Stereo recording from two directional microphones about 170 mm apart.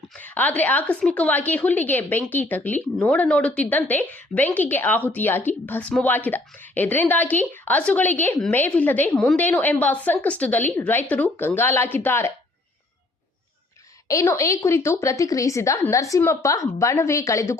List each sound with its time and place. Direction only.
0.1 s a woman's voice: 10° left (ahead or behind)
14.1 s a woman's voice: 20° left (ahead or behind)